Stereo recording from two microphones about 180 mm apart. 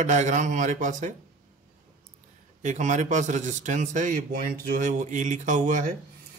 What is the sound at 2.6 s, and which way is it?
A man's voice, 45° right (ahead or behind).